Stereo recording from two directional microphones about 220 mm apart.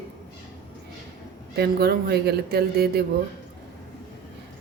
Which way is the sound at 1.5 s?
45° right (ahead or behind).